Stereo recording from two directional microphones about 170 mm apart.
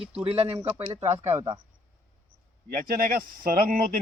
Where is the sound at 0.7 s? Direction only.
15° right (ahead or behind).